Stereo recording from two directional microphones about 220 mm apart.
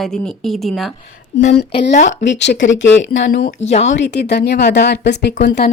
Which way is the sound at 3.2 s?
35° left (ahead or behind).